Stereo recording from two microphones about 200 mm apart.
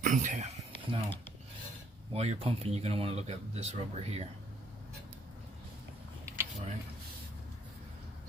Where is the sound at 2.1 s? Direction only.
30° right (ahead or behind).